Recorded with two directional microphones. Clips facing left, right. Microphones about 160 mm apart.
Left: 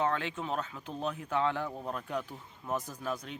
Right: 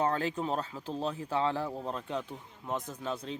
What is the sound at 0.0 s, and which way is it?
Speech, 40° right (ahead or behind).